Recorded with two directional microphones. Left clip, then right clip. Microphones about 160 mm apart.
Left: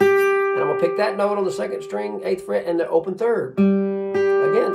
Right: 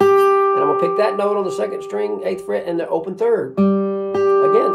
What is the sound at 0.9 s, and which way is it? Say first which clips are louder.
Speech: right 3 dB; 20° right (ahead or behind).